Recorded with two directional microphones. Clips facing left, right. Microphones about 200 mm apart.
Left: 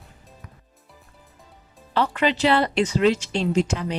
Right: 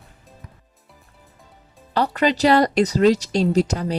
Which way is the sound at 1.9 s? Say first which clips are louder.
Right 2 dB; 40° right (ahead or behind).